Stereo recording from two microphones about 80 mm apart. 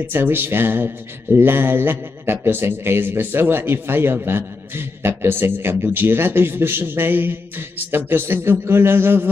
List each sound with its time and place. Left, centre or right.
0.0 s speech: right